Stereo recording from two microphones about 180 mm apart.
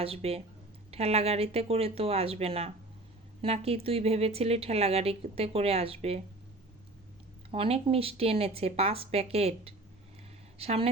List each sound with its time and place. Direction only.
0.0 s a woman's voice: 35° right (ahead or behind)
7.5 s a woman's voice: 30° right (ahead or behind)